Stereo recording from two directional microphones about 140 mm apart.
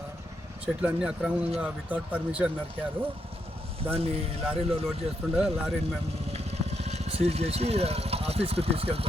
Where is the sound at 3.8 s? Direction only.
45° right (ahead or behind).